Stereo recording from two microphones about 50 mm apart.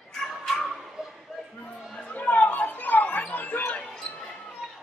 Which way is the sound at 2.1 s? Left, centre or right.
Left.